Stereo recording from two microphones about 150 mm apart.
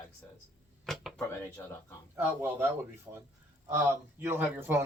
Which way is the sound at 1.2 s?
15° left (ahead or behind).